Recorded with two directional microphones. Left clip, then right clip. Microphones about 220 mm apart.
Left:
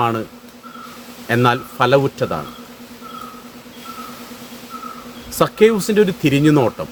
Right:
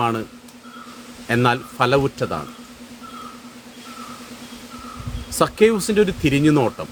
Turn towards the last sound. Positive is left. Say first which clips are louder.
# left 3 dB
turn(degrees=0)  # may be behind; listen again after turning